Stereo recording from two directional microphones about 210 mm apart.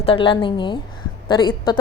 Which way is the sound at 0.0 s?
25° left (ahead or behind).